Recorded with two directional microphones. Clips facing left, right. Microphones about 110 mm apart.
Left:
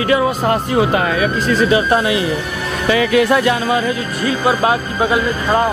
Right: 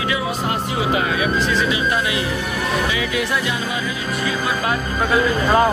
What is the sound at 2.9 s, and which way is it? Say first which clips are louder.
Speech: left 9 dB; 60° left (ahead or behind).